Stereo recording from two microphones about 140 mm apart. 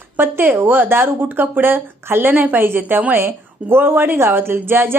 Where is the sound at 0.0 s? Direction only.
15° right (ahead or behind).